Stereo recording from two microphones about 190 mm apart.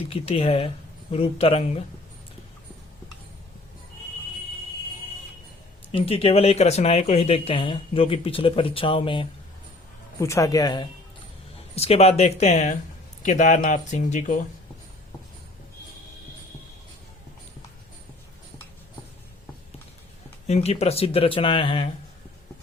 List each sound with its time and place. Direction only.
0.1 s speech: 30° left (ahead or behind)
5.9 s speech: 30° left (ahead or behind)
10.2 s speech: 15° left (ahead or behind)
11.7 s speech: 35° left (ahead or behind)
20.5 s speech: 35° left (ahead or behind)